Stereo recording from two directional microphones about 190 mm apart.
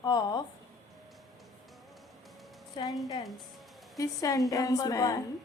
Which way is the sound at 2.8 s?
25° left (ahead or behind).